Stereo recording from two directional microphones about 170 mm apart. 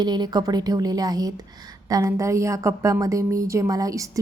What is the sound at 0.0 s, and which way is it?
A woman's voice, 25° right (ahead or behind).